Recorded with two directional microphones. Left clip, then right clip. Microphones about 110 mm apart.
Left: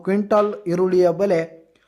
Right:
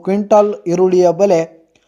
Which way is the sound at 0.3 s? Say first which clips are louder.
Right 8 dB; 15° right (ahead or behind).